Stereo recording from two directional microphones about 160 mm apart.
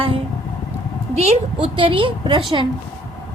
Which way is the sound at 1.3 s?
35° right (ahead or behind).